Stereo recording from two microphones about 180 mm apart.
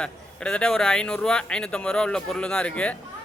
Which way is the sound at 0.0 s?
5° left (ahead or behind).